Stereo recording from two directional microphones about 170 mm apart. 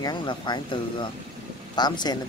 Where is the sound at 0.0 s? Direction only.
25° left (ahead or behind).